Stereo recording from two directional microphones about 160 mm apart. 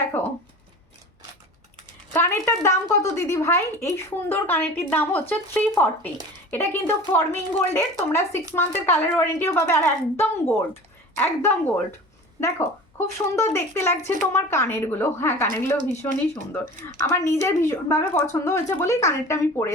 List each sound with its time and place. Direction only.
0.1 s a sound: 15° left (ahead or behind)
2.1 s speech: 15° left (ahead or behind)
16.5 s speech: 10° left (ahead or behind)